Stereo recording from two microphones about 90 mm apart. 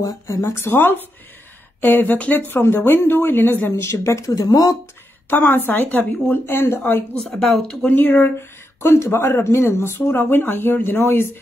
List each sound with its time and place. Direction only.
0.0 s speech: 35° left (ahead or behind)
5.3 s speech: 20° left (ahead or behind)
7.3 s speech: 5° left (ahead or behind)
7.8 s speech: 20° left (ahead or behind)